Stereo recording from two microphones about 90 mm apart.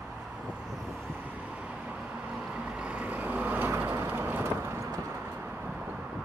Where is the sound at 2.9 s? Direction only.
15° right (ahead or behind).